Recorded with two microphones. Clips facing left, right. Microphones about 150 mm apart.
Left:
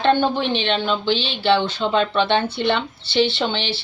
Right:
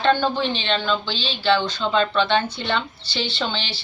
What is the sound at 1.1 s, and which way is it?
Speech, 60° left (ahead or behind).